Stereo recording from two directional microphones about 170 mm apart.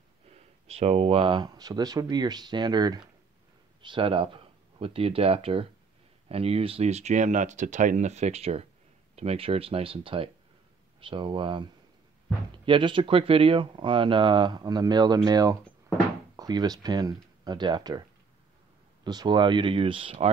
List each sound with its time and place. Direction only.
0.3 s speech: 40° right (ahead or behind)
12.6 s speech: 30° right (ahead or behind)
19.0 s speech: 25° right (ahead or behind)